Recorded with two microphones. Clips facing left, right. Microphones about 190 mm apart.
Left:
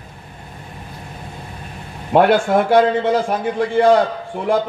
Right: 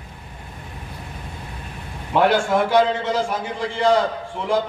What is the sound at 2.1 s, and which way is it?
A man's voice, 55° left (ahead or behind).